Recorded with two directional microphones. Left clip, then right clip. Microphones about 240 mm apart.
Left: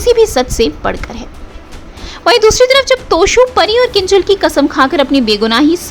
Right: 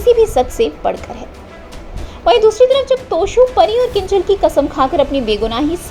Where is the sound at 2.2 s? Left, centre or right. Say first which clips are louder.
Left 2 dB; left.